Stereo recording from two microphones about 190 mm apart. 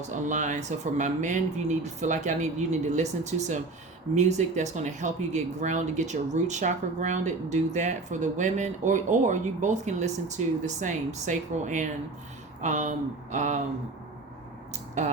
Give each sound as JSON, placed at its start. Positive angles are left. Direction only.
{"t": 0.3, "sound": "speech", "side_deg": -40}
{"t": 15.0, "sound": "speech", "side_deg": -40}